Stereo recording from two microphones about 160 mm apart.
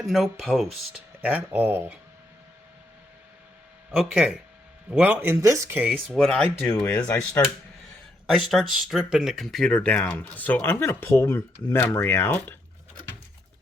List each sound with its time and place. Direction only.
0.0 s speech: centre (ahead or behind)
3.9 s speech: 5° right (ahead or behind)
5.9 s speech: centre (ahead or behind)
6.6 s speech: 25° left (ahead or behind)
6.8 s speech: 5° left (ahead or behind)